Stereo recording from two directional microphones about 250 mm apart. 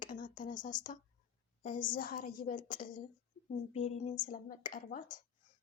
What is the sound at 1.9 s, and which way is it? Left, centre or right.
Speech, left.